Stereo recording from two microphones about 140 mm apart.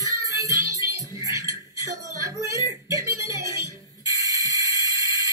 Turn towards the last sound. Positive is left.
turn(degrees=-25)  # may be behind; listen again after turning